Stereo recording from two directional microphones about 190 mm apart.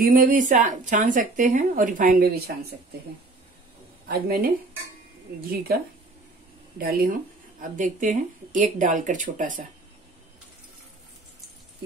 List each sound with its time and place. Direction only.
0.1 s a woman's voice: 45° right (ahead or behind)
4.1 s a woman's voice: 50° right (ahead or behind)
5.5 s a woman's voice: 50° right (ahead or behind)
6.8 s a woman's voice: 50° right (ahead or behind)